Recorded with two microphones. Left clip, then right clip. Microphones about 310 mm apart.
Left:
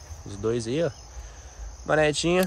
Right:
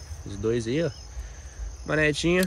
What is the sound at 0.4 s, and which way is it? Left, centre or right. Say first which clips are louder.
Speech: even; centre.